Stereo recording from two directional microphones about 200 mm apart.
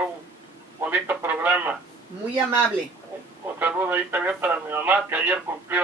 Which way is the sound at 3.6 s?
10° right (ahead or behind).